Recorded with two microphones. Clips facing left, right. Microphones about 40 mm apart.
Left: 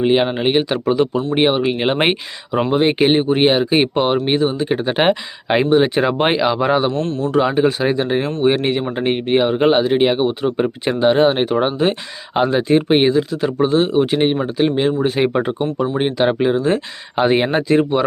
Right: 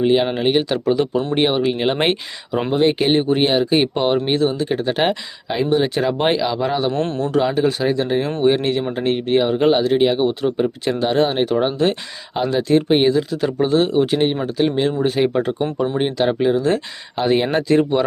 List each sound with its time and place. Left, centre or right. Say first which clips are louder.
0.0 s speech: left 1 dB; left
5.5 s speech: left 5 dB; left
5.7 s speech: left 2 dB; left
6.9 s a man's voice: even; right
7.3 s speech: left 3 dB; centre
13.1 s speech: left 2 dB; centre
15.2 s speech: left 1 dB; left
17.5 s speech: left 1 dB; centre